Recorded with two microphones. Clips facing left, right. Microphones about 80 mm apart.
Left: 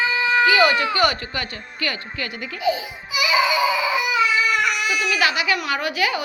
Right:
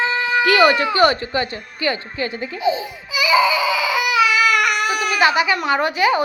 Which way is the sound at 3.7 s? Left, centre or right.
Right.